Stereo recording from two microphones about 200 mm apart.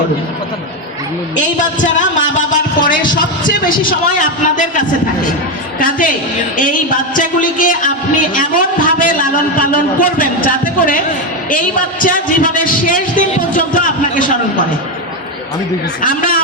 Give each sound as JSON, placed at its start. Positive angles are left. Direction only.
{"t": 1.4, "sound": "a man's voice", "side_deg": 40}
{"t": 16.0, "sound": "a man's voice", "side_deg": 45}